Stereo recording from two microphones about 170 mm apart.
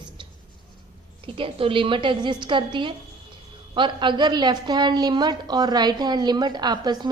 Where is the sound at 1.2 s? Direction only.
30° right (ahead or behind).